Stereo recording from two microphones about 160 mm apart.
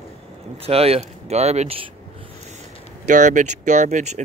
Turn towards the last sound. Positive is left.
turn(degrees=-50)  # may be behind; listen again after turning